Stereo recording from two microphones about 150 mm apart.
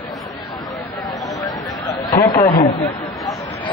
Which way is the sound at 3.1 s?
Centre (ahead or behind).